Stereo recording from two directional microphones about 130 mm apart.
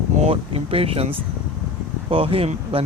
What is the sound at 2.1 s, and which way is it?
Speech, 45° right (ahead or behind).